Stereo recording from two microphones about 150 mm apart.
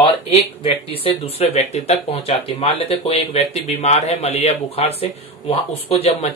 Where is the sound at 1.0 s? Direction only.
40° left (ahead or behind).